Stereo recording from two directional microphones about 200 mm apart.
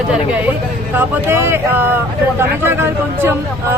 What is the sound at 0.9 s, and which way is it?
Speech, 10° right (ahead or behind).